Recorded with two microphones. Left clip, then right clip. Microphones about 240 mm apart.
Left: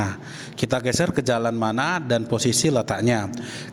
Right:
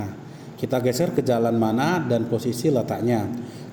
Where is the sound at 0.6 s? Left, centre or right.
Left.